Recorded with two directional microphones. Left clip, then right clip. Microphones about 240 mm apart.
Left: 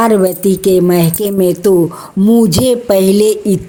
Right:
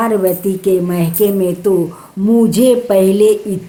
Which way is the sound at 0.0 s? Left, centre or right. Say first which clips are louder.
Left 3 dB; left.